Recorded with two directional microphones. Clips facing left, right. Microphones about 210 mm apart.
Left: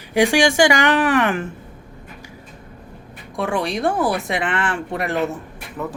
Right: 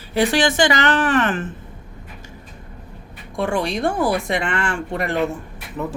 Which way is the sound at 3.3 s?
Centre (ahead or behind).